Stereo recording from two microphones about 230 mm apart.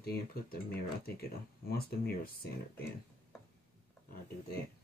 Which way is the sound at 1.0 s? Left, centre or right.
Left.